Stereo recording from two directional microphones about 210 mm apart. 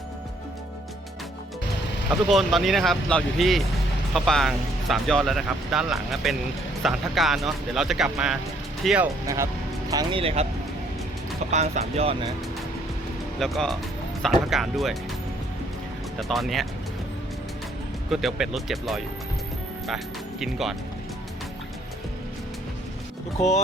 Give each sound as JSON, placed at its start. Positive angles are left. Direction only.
{"t": 2.0, "sound": "speech", "side_deg": 0}
{"t": 9.2, "sound": "speech", "side_deg": -15}
{"t": 11.5, "sound": "speech", "side_deg": -30}
{"t": 13.4, "sound": "speech", "side_deg": 0}
{"t": 16.1, "sound": "speech", "side_deg": 0}
{"t": 18.1, "sound": "speech", "side_deg": 0}
{"t": 20.4, "sound": "speech", "side_deg": 0}